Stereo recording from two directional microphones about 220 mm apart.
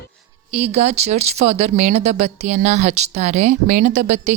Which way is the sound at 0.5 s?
30° right (ahead or behind).